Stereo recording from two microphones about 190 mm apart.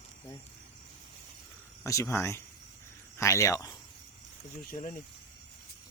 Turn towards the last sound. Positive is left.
turn(degrees=45)  # may be behind; listen again after turning